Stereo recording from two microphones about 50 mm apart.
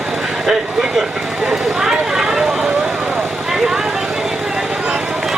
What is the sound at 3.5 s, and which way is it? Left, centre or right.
Vehicle, centre.